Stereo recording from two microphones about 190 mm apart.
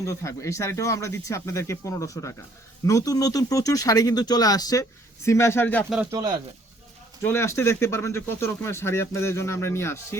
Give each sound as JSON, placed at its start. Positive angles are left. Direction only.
{"t": 0.0, "sound": "speech", "side_deg": 15}
{"t": 6.1, "sound": "speech", "side_deg": -20}
{"t": 7.2, "sound": "speech", "side_deg": 15}